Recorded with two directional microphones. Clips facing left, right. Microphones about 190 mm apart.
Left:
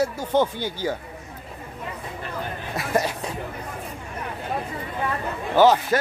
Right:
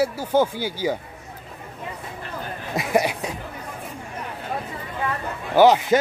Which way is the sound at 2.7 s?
15° right (ahead or behind).